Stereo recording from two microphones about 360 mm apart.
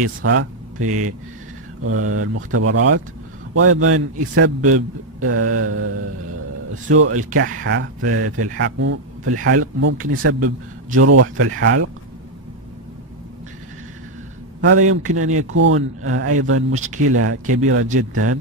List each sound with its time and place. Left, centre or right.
0.2 s speech: right
6.9 s speech: right
14.6 s speech: right